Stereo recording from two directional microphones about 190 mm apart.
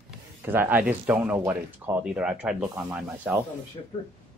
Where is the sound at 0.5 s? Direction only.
10° right (ahead or behind).